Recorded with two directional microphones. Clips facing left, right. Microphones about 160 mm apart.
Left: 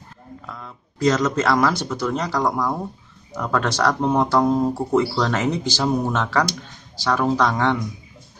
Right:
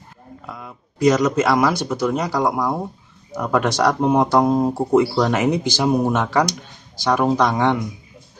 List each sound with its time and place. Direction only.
0.5 s speech: 10° right (ahead or behind)